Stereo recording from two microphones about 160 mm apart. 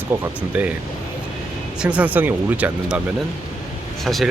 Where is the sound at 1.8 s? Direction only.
10° right (ahead or behind).